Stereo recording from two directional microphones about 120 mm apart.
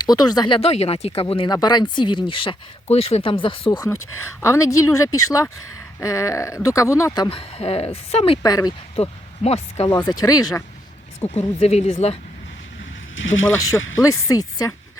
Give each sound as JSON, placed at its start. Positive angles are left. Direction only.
{"t": 0.1, "sound": "speech", "side_deg": 35}
{"t": 0.7, "sound": "speech", "side_deg": 60}
{"t": 1.5, "sound": "speech", "side_deg": 35}
{"t": 4.4, "sound": "speech", "side_deg": 25}
{"t": 7.2, "sound": "speech", "side_deg": 50}
{"t": 8.4, "sound": "speech", "side_deg": 30}
{"t": 9.0, "sound": "speech", "side_deg": 60}
{"t": 10.0, "sound": "speech", "side_deg": 30}
{"t": 11.2, "sound": "speech", "side_deg": 60}
{"t": 13.6, "sound": "speech", "side_deg": 30}